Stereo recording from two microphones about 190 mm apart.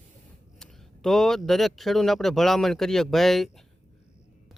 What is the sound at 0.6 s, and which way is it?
Speech, 5° left (ahead or behind).